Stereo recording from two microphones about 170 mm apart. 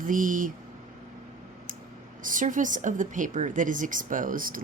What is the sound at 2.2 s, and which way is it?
A woman's voice, 50° right (ahead or behind).